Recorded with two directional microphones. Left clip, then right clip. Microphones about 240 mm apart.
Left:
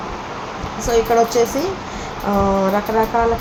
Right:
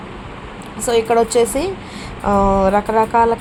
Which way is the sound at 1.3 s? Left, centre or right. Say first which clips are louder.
Right 2 dB; centre.